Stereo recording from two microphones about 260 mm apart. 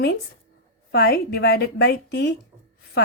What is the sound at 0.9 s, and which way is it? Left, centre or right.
A woman's voice, left.